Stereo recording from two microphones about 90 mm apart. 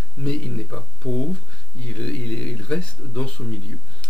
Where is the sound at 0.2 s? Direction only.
15° left (ahead or behind).